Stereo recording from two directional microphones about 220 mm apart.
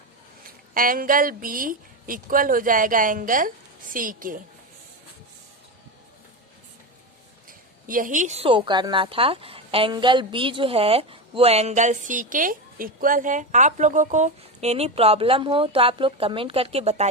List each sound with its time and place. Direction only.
0.7 s a woman's voice: 40° right (ahead or behind)
7.4 s a woman's voice: 40° right (ahead or behind)